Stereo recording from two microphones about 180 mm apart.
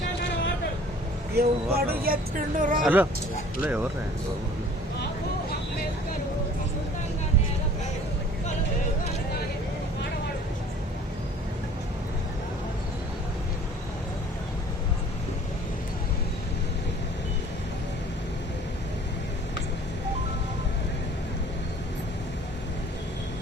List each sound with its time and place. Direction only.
1.4 s speech: 60° right (ahead or behind)
2.6 s speech: 45° right (ahead or behind)
2.8 s speech: 10° right (ahead or behind)